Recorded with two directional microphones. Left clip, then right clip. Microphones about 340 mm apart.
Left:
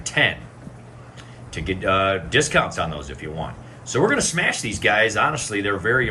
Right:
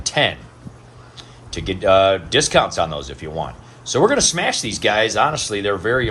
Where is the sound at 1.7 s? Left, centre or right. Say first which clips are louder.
Right 6 dB; centre.